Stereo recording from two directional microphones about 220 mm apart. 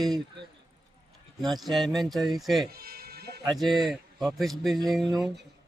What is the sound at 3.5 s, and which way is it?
Speech, centre (ahead or behind).